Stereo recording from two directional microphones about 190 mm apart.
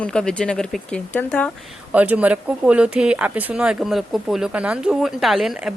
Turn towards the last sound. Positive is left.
turn(degrees=0)  # may be behind; listen again after turning